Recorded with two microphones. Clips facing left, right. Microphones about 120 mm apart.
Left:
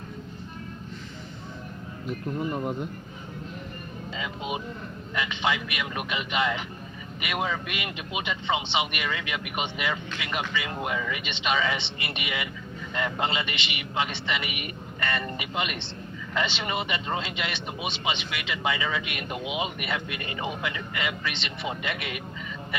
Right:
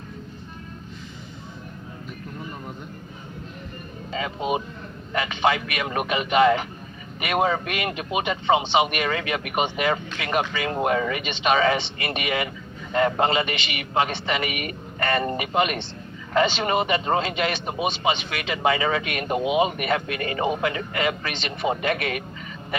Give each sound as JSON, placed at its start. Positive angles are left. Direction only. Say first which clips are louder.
{"t": 4.1, "sound": "speech", "louder": "right 7 dB", "side_deg": -45}